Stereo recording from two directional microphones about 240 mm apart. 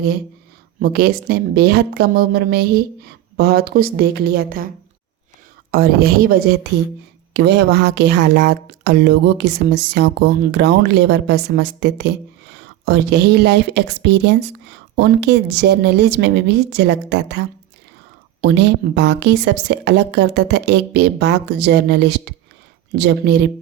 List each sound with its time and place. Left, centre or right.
0.8 s a woman's voice: right
5.7 s a woman's voice: right
18.4 s speech: right